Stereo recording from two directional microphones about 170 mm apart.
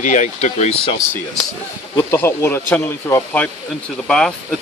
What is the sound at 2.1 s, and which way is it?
Speech, 15° left (ahead or behind).